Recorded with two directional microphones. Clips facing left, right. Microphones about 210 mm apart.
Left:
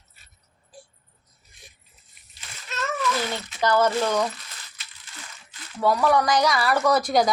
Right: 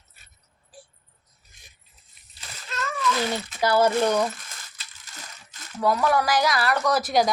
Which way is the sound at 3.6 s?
10° right (ahead or behind).